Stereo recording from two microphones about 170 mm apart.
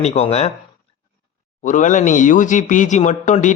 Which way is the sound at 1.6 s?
50° left (ahead or behind).